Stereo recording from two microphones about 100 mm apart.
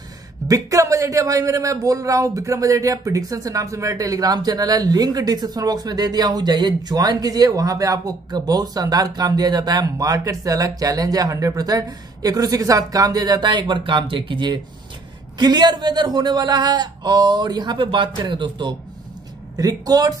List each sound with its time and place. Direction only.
0.5 s a man's voice: 35° right (ahead or behind); by 18.8 s 55° right (ahead or behind)
19.5 s a man's voice: 40° right (ahead or behind)